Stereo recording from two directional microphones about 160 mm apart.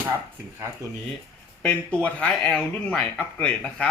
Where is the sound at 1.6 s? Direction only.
10° left (ahead or behind).